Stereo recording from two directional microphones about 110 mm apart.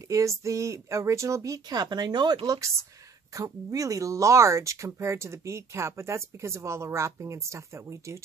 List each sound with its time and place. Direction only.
0.1 s speech: 30° right (ahead or behind)